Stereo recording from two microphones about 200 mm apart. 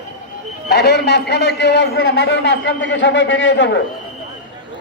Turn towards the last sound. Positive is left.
turn(degrees=60)  # may be behind; listen again after turning